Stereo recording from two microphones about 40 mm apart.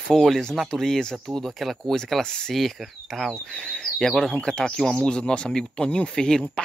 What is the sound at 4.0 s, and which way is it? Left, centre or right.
Speech, centre.